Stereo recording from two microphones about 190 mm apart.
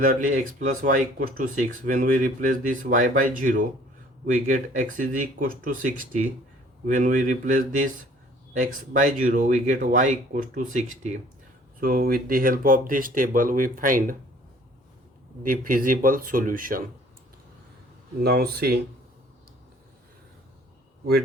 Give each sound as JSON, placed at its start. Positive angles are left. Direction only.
{"t": 0.0, "sound": "speech", "side_deg": -45}
{"t": 11.8, "sound": "speech", "side_deg": -50}
{"t": 15.4, "sound": "speech", "side_deg": -45}
{"t": 18.2, "sound": "speech", "side_deg": -55}